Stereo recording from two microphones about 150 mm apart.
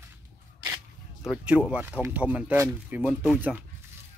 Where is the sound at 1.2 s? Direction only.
5° right (ahead or behind).